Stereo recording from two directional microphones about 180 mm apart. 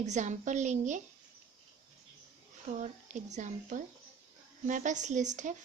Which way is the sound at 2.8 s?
40° right (ahead or behind).